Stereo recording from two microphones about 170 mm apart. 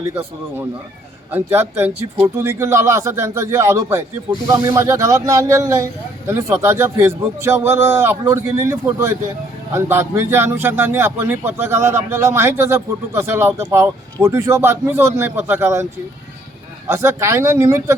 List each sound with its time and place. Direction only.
0.1 s a man's voice: 15° right (ahead or behind)